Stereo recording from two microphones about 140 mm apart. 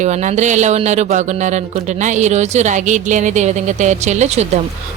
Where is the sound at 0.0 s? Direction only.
55° right (ahead or behind).